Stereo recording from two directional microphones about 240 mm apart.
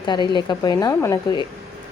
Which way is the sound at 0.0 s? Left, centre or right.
Centre.